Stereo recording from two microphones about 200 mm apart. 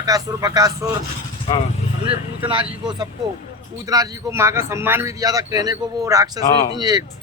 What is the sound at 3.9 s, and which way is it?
A man's voice, 15° right (ahead or behind).